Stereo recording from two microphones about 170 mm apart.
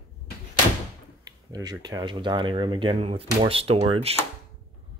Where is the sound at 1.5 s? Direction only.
20° right (ahead or behind).